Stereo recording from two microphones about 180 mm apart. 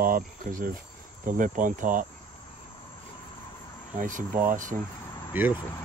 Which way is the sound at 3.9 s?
45° right (ahead or behind).